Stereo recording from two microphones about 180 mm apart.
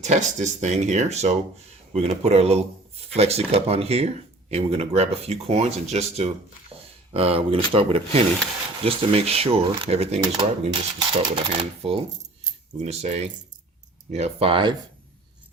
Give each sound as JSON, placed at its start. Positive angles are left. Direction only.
{"t": 0.0, "sound": "speech", "side_deg": -40}
{"t": 6.7, "sound": "a sound", "side_deg": -30}
{"t": 7.1, "sound": "speech", "side_deg": -30}